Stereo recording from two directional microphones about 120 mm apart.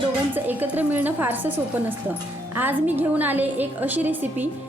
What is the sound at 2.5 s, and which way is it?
A woman's voice, 15° right (ahead or behind).